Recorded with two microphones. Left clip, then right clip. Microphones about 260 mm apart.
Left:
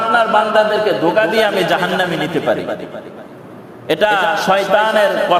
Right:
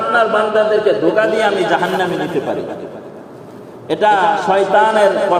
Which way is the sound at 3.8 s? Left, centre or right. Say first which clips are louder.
Right 1 dB; left.